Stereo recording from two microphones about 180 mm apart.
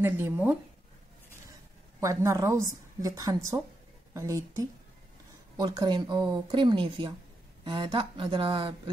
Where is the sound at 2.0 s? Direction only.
15° right (ahead or behind).